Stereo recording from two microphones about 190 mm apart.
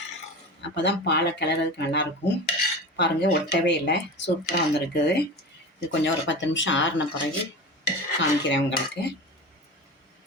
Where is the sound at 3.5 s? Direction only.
65° left (ahead or behind).